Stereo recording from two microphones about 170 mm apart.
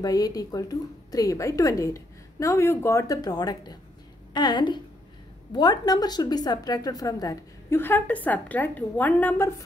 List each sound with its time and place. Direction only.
0.0 s a woman's voice: 20° left (ahead or behind)